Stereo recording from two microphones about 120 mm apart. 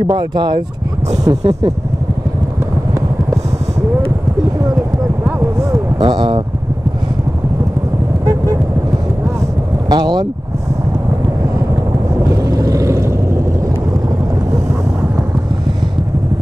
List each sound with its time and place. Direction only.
0.0 s speech: 35° right (ahead or behind)
5.6 s a sound: 25° right (ahead or behind)
6.0 s speech: 40° right (ahead or behind)
9.8 s vehicle: 40° right (ahead or behind)
12.2 s vehicle: 25° right (ahead or behind)